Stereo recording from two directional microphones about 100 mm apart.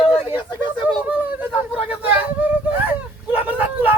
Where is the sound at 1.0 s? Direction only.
15° right (ahead or behind).